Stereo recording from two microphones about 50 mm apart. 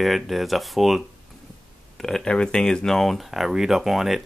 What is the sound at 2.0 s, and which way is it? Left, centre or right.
Speech, centre.